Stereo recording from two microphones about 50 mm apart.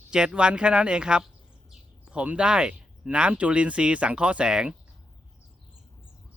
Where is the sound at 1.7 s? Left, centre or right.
Centre.